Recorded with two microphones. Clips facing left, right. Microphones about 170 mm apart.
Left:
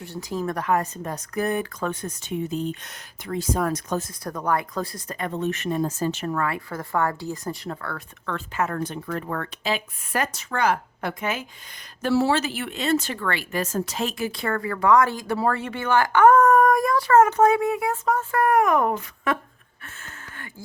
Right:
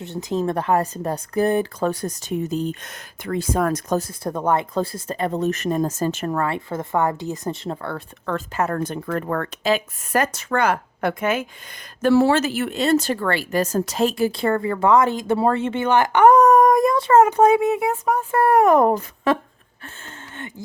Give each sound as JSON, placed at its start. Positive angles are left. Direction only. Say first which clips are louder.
{"t": 0.0, "sound": "speech", "louder": "right 5 dB", "side_deg": -20}
{"t": 3.2, "sound": "speech", "louder": "right 3 dB", "side_deg": -60}
{"t": 4.2, "sound": "speech", "louder": "right 4 dB", "side_deg": -25}
{"t": 6.3, "sound": "speech", "louder": "right 3 dB", "side_deg": -30}
{"t": 8.3, "sound": "speech", "louder": "right 4 dB", "side_deg": -40}